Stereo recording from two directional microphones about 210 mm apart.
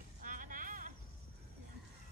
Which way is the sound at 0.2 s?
40° right (ahead or behind).